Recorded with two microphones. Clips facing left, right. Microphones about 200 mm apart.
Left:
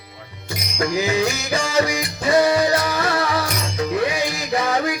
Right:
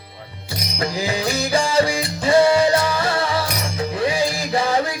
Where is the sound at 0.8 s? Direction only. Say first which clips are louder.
Left 3 dB; 30° right (ahead or behind).